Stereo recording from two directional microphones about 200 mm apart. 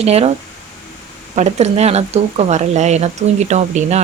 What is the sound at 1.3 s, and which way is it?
Speech, 35° right (ahead or behind).